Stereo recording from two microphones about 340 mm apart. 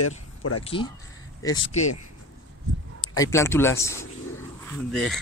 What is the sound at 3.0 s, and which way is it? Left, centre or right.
Speech, centre.